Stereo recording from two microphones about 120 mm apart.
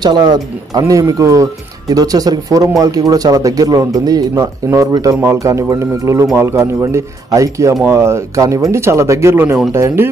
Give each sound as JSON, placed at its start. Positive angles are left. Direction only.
{"t": 0.0, "sound": "speech", "side_deg": -35}